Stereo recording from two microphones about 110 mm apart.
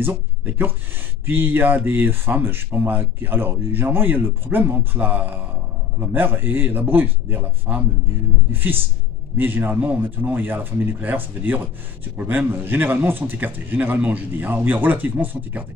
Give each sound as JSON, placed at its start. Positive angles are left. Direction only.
{"t": 0.0, "sound": "a man's voice", "side_deg": -20}